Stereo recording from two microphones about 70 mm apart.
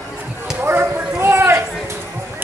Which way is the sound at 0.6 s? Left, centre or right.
Right.